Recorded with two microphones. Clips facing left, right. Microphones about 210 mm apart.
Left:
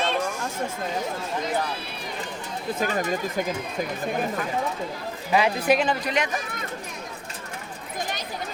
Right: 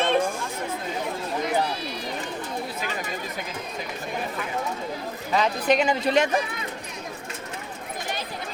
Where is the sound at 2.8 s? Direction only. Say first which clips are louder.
Left 6 dB; 45° left (ahead or behind).